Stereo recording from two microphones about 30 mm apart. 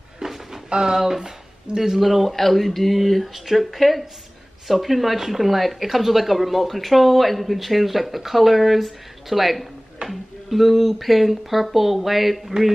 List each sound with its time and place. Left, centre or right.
0.2 s a sound: centre
0.7 s speech: right
2.0 s speech: centre
2.3 s speech: centre